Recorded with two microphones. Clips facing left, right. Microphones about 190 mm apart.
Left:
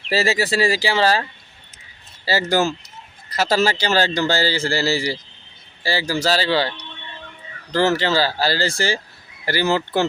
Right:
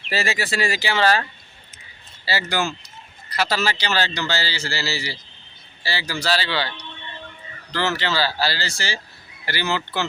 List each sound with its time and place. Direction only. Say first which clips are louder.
0.1 s speech: left 5 dB; 35° left (ahead or behind)
2.2 s speech: left 5 dB; 45° left (ahead or behind)